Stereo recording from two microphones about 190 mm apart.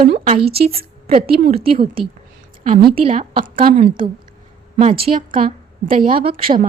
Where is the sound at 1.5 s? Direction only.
50° right (ahead or behind).